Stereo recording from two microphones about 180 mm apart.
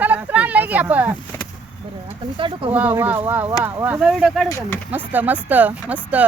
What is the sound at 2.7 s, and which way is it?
Speech, 10° right (ahead or behind).